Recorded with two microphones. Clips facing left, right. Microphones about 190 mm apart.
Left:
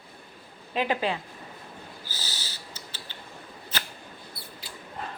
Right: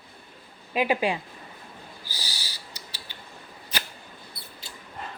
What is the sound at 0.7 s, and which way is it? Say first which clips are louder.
Speech: right 3 dB; 10° right (ahead or behind).